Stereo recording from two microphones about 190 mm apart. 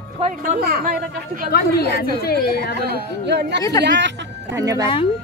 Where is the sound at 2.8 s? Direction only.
60° right (ahead or behind).